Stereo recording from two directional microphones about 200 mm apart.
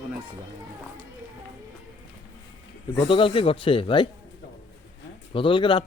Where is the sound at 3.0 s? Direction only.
25° left (ahead or behind).